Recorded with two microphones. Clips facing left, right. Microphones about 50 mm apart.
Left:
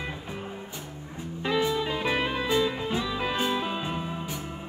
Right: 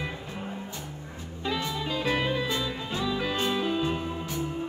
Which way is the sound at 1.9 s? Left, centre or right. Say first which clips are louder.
Even; left.